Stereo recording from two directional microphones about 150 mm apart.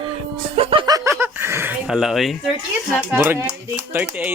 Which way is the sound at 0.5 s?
35° right (ahead or behind).